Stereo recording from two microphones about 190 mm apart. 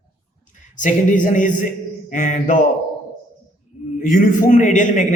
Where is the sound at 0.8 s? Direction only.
40° left (ahead or behind).